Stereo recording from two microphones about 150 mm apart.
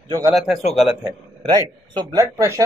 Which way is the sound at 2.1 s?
20° right (ahead or behind).